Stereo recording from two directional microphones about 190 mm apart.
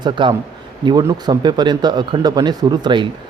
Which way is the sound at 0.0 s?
25° right (ahead or behind).